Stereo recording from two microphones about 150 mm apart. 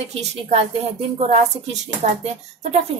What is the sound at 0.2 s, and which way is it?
A woman's voice, 45° right (ahead or behind).